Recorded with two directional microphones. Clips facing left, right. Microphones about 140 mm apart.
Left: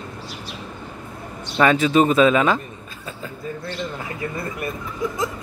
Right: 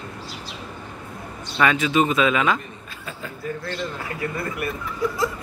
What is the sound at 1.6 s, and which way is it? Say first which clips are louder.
Speech: left 4 dB; 35° left (ahead or behind).